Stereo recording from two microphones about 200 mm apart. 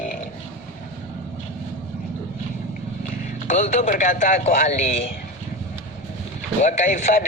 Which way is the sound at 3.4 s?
40° left (ahead or behind).